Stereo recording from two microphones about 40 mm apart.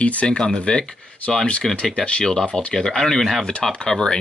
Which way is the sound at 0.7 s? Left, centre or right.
Left.